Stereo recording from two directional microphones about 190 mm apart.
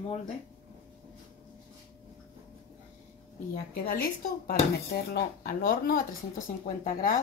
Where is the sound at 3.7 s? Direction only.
50° left (ahead or behind).